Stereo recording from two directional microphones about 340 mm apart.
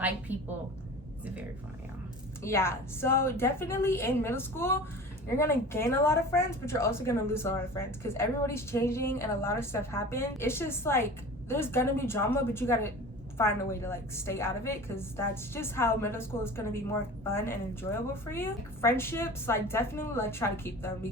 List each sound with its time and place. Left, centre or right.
0.3 s a woman's voice: centre
2.4 s a woman's voice: centre